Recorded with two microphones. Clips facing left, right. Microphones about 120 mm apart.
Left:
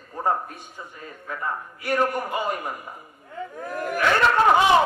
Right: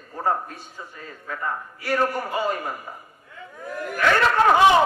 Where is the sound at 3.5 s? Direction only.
45° left (ahead or behind).